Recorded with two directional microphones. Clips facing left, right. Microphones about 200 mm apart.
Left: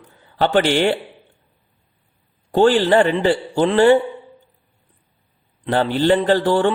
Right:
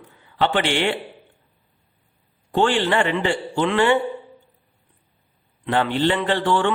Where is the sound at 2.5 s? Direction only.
40° left (ahead or behind).